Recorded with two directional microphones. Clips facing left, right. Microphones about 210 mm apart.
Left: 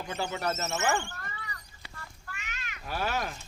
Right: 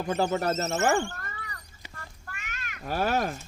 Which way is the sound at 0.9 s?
45° right (ahead or behind).